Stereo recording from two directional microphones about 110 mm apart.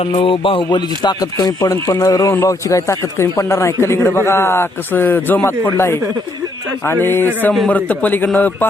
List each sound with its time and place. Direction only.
0.0 s a man's voice: 55° left (ahead or behind); by 8.5 s 15° left (ahead or behind)